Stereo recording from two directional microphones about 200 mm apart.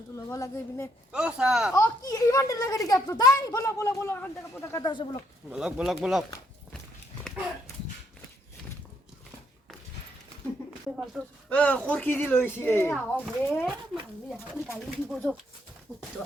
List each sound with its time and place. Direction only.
0.3 s a child's voice: 15° left (ahead or behind)
1.1 s speech: 5° right (ahead or behind)
1.7 s a child's voice: 15° left (ahead or behind)
5.5 s speech: 5° right (ahead or behind)
10.9 s a child's voice: centre (ahead or behind)